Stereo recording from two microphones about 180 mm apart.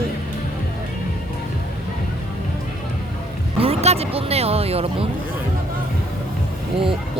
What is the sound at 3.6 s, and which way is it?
Speech, 35° right (ahead or behind).